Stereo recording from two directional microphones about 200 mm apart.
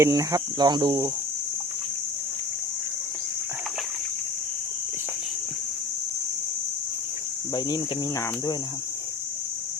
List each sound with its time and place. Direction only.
0.0 s speech: 15° right (ahead or behind)